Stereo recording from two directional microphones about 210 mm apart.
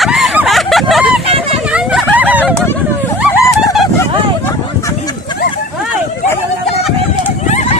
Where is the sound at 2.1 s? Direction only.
10° right (ahead or behind).